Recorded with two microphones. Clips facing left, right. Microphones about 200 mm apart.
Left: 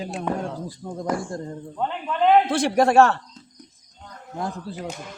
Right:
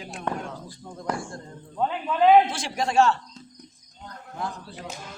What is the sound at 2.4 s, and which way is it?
Speech, 60° left (ahead or behind).